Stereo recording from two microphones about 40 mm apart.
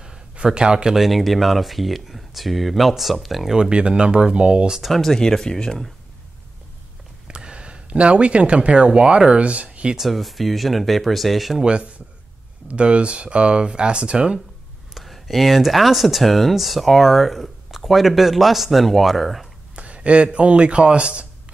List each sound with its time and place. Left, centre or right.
0.0 s a sound: centre
0.9 s speech: centre
3.5 s speech: right
4.8 s speech: centre
7.2 s speech: right
9.9 s speech: centre
11.6 s speech: right
15.0 s speech: centre
19.7 s a man's voice: right